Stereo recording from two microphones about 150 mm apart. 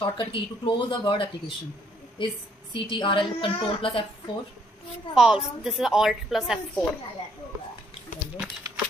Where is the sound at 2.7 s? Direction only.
35° left (ahead or behind).